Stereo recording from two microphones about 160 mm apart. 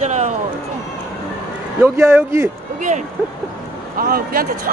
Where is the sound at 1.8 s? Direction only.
15° right (ahead or behind).